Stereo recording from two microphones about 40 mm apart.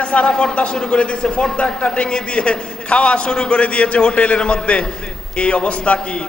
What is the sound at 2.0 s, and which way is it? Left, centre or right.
A man's voice, left.